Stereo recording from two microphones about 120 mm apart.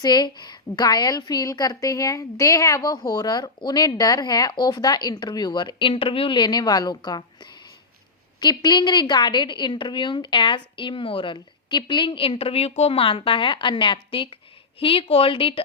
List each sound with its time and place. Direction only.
0.0 s a woman's voice: 35° left (ahead or behind)